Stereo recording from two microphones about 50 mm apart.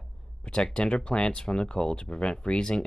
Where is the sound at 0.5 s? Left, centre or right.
Centre.